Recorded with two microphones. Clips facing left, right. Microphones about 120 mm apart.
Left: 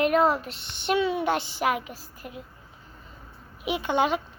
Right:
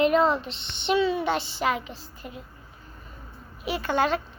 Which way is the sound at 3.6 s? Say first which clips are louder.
Even; 15° left (ahead or behind).